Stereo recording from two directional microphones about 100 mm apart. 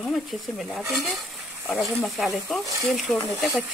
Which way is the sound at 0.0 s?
Centre (ahead or behind).